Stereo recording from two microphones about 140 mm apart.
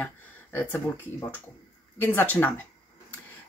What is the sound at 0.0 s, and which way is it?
Speech, 15° left (ahead or behind).